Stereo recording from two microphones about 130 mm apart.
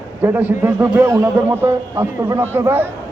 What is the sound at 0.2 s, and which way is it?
A man's voice, 15° right (ahead or behind).